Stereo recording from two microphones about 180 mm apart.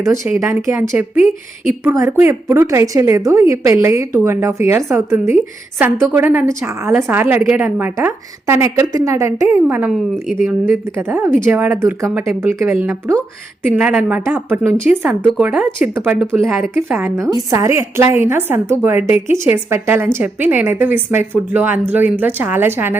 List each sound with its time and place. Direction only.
0.0 s a woman's voice: 15° right (ahead or behind)